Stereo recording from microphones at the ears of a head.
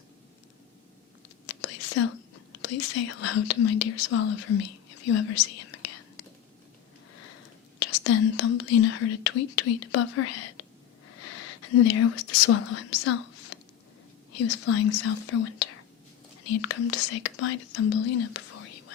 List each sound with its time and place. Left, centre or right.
1.5 s speech: left